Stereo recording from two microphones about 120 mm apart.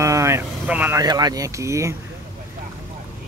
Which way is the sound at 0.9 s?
35° right (ahead or behind).